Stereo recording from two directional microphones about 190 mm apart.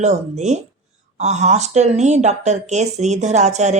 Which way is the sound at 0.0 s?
35° right (ahead or behind).